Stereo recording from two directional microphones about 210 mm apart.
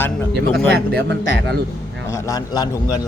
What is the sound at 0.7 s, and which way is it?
Speech, 50° right (ahead or behind).